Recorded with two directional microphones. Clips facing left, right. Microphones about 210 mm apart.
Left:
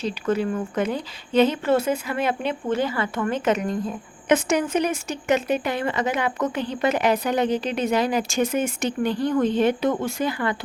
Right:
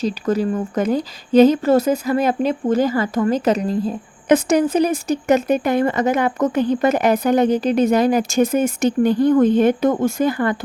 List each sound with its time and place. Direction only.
0.0 s a woman's voice: 40° right (ahead or behind)